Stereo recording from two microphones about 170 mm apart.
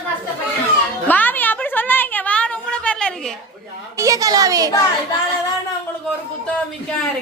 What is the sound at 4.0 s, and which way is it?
Speech, 20° right (ahead or behind).